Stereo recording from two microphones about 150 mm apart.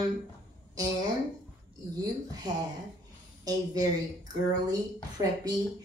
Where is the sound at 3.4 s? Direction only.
25° right (ahead or behind).